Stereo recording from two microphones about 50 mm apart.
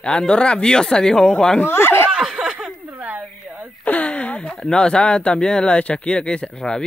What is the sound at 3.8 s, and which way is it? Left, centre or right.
Speech, left.